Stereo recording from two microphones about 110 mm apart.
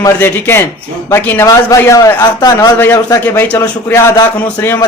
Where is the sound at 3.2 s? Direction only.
20° left (ahead or behind).